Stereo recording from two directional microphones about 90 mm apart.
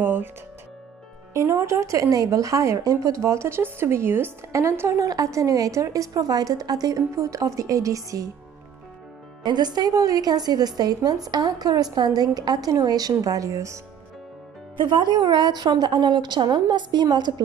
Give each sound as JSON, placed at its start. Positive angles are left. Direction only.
{"t": 0.0, "sound": "music", "side_deg": -20}
{"t": 1.3, "sound": "speech", "side_deg": -35}
{"t": 9.4, "sound": "a woman's voice", "side_deg": -55}
{"t": 14.8, "sound": "a woman's voice", "side_deg": -55}